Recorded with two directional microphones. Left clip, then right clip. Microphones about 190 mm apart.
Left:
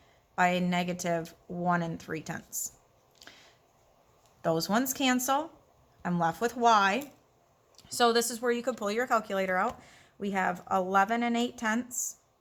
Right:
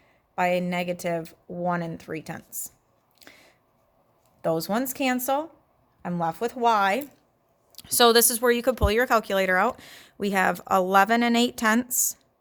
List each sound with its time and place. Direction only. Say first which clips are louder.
0.3 s speech: right 3 dB; 30° right (ahead or behind)
3.2 s a sound: right 2 dB; 30° right (ahead or behind)
4.4 s speech: right 3 dB; 30° right (ahead or behind)
7.7 s speech: right 7 dB; 55° right (ahead or behind)